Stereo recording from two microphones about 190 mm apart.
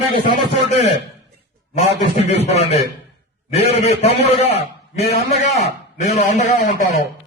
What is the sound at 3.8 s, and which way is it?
A man's voice, 35° left (ahead or behind).